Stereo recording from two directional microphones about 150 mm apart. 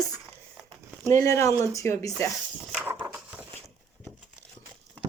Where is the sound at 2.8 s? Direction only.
10° right (ahead or behind).